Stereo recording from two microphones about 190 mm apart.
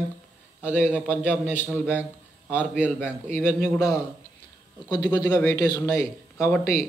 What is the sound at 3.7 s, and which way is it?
A man's voice, 20° left (ahead or behind).